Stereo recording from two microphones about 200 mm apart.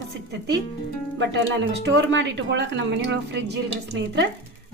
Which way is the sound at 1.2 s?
60° right (ahead or behind).